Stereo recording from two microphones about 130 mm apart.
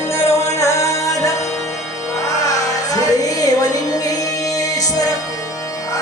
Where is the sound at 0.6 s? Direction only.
25° left (ahead or behind).